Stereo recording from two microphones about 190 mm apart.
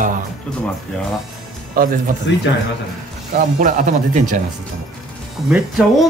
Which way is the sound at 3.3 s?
45° right (ahead or behind).